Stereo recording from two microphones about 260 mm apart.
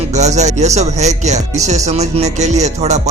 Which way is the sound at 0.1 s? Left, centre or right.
Right.